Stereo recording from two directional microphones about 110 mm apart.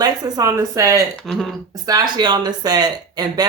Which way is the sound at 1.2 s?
5° left (ahead or behind).